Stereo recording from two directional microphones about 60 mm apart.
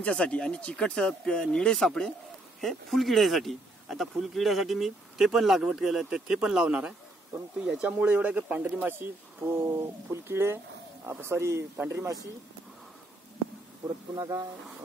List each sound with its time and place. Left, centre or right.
0.0 s speech: left; by 7.9 s centre
7.9 s speech: right
14.1 s speech: right